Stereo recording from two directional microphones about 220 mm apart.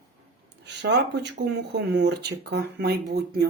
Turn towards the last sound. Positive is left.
turn(degrees=-50)  # may be behind; listen again after turning